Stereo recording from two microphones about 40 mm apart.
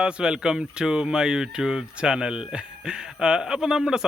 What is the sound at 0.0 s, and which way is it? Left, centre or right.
Speech, right.